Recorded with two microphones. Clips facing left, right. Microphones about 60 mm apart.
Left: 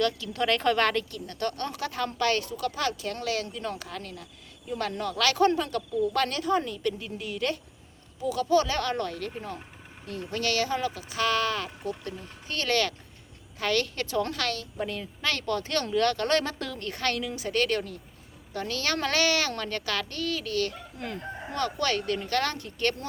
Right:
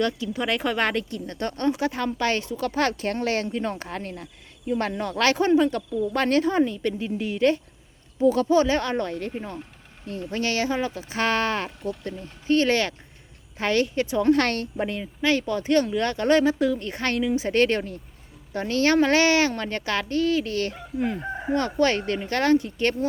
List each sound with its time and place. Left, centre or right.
0.0 s speech: centre
14.3 s a woman's voice: right
14.8 s speech: right